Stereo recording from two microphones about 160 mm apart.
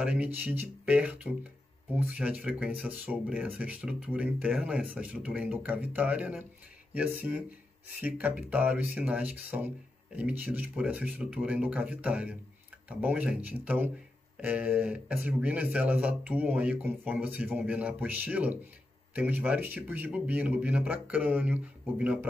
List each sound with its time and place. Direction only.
0.0 s speech: 10° right (ahead or behind)